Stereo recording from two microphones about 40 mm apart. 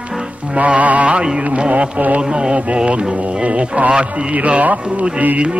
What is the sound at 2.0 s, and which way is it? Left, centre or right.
Speech, right.